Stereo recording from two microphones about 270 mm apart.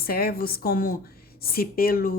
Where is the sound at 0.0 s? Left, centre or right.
Left.